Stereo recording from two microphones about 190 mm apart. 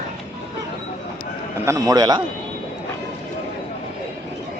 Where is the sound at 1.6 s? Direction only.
20° right (ahead or behind).